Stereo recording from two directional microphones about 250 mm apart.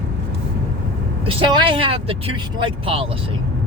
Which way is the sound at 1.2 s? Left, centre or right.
Right.